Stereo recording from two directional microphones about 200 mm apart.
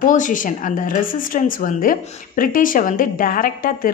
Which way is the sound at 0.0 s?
40° left (ahead or behind).